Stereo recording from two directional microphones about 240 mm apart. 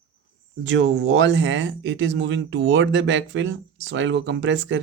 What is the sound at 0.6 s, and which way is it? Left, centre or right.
Speech, right.